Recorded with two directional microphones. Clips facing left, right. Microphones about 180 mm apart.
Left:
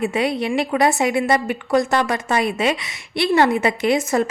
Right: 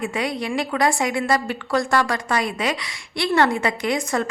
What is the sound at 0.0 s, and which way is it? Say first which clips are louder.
A woman's voice: left 5 dB; 25° left (ahead or behind).